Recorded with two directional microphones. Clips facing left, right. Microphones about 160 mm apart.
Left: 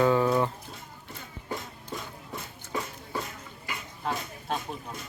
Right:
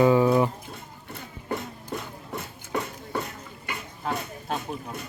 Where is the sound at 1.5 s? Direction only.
65° right (ahead or behind).